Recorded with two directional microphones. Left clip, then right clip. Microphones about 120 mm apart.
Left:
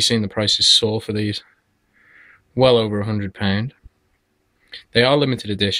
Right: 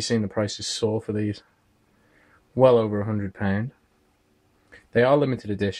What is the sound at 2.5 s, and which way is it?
Speech, 10° left (ahead or behind).